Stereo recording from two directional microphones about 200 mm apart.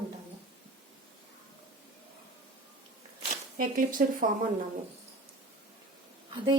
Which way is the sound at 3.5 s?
45° right (ahead or behind).